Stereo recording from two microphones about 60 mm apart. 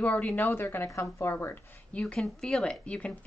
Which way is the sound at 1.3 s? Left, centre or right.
Left.